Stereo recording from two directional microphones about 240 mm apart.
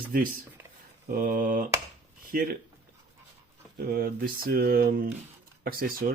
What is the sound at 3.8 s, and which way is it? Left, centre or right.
Speech, right.